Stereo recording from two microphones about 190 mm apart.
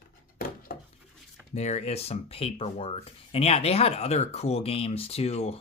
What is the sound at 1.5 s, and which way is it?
Speech, 35° left (ahead or behind).